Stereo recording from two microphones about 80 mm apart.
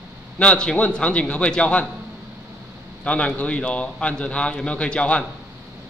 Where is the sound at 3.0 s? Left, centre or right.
Centre.